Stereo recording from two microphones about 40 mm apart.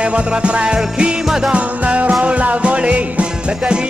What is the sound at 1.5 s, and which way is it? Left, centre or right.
Music, right.